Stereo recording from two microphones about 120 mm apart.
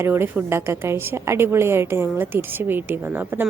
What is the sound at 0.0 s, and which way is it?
A woman's voice, 20° right (ahead or behind).